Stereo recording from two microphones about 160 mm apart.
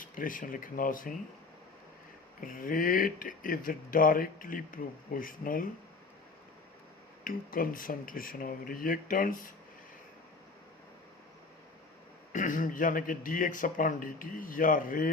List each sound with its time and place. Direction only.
0.0 s speech: 55° left (ahead or behind)
2.4 s speech: 60° left (ahead or behind)
7.3 s speech: 60° left (ahead or behind)
12.3 s speech: 55° left (ahead or behind)